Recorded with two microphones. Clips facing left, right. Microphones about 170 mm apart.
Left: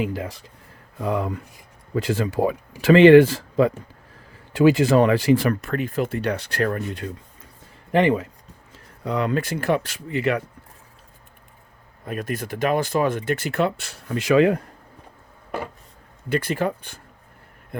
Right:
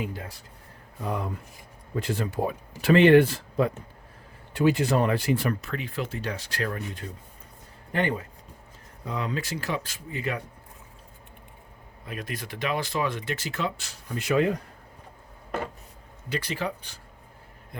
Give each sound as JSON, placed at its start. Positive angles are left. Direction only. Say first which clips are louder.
{"t": 0.0, "sound": "speech", "louder": "left 8 dB", "side_deg": 90}
{"t": 5.6, "sound": "speech", "louder": "left 8 dB", "side_deg": 50}
{"t": 7.9, "sound": "speech", "louder": "left 9 dB", "side_deg": 90}
{"t": 9.0, "sound": "speech", "louder": "left 8 dB", "side_deg": 65}
{"t": 12.0, "sound": "speech", "louder": "left 8 dB", "side_deg": 50}
{"t": 16.3, "sound": "speech", "louder": "left 7 dB", "side_deg": 50}